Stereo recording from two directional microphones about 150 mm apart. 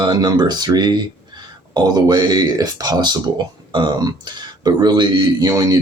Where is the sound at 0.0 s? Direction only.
25° right (ahead or behind).